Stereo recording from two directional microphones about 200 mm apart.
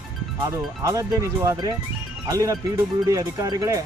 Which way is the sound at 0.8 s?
15° right (ahead or behind).